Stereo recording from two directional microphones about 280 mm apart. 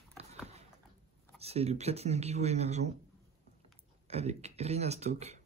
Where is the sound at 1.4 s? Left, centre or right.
Right.